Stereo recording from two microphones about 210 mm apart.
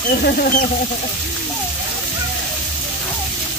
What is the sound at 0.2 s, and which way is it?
Speech, 45° left (ahead or behind).